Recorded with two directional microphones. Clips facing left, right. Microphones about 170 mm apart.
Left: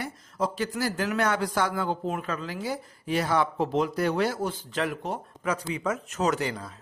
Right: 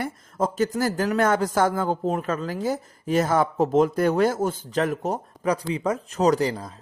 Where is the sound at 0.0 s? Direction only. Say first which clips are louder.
Right 4 dB; 45° right (ahead or behind).